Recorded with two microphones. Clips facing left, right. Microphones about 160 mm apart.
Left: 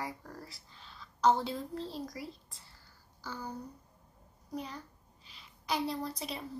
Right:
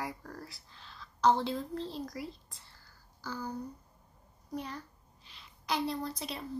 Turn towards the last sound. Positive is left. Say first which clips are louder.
# even
turn(degrees=0)  # may be behind; listen again after turning